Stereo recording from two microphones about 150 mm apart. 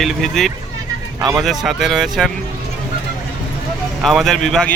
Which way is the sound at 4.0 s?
Centre (ahead or behind).